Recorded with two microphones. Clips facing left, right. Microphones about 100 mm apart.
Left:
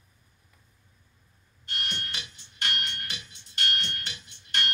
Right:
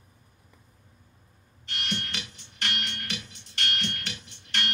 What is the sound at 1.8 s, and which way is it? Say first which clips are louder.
Music: right 4 dB; 75° right (ahead or behind).